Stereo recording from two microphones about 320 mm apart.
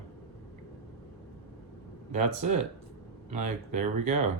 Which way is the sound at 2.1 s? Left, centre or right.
Right.